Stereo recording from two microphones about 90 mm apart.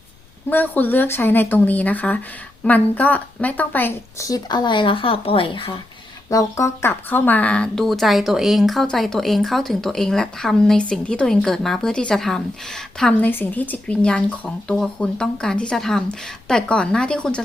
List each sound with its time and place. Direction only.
0.5 s a woman's voice: 20° left (ahead or behind)
4.4 s speech: 55° left (ahead or behind); by 5.8 s 80° left
6.3 s speech: 40° left (ahead or behind)
6.8 s a woman's voice: 20° left (ahead or behind)
13.1 s speech: 20° left (ahead or behind)